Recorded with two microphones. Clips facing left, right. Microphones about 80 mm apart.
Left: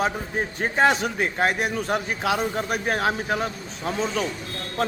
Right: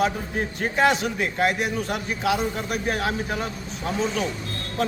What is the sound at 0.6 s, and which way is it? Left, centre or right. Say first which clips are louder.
A man's voice: left 1 dB; left.